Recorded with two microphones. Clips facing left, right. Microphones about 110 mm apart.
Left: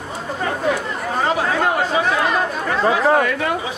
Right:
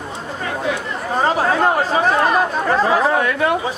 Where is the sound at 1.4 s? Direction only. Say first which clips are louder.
Right 2 dB; 40° right (ahead or behind).